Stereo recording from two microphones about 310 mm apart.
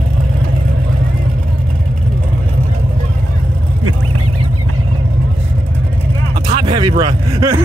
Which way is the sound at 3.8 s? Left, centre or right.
Right.